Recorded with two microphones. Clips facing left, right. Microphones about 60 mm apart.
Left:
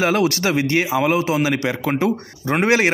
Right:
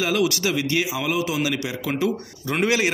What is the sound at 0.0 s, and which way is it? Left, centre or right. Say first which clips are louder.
A man's voice: left 4 dB; left.